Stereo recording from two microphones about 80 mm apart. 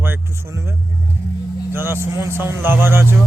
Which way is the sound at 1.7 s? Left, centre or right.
Right.